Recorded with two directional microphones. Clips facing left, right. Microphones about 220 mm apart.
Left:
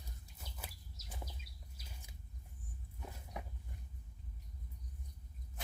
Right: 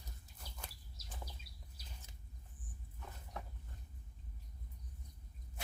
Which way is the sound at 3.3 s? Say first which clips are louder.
Left 1 dB; 15° left (ahead or behind).